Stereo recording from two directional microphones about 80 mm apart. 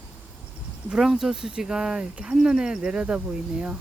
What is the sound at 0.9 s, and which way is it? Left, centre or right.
Speech, centre.